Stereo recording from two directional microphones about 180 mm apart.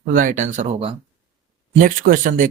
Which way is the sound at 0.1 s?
45° right (ahead or behind).